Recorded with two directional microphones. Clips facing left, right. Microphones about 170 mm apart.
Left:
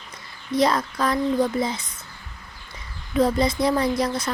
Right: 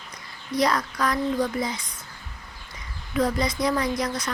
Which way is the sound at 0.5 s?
25° left (ahead or behind).